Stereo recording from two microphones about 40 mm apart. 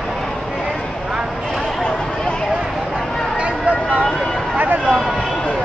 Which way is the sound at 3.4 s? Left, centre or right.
Right.